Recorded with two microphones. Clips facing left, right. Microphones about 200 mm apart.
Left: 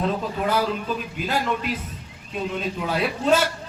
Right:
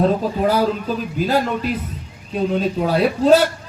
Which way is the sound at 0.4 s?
40° right (ahead or behind).